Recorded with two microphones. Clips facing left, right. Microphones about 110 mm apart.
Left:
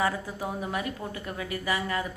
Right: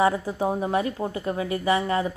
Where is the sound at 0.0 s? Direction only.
30° right (ahead or behind).